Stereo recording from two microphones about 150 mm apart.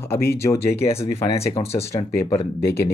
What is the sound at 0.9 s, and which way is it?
Speech, 40° left (ahead or behind).